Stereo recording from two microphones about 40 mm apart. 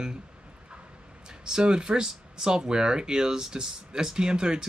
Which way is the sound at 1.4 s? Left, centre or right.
Centre.